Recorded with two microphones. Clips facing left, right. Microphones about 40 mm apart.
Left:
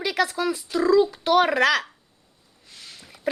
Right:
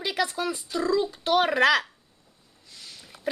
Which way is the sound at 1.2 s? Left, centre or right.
Centre.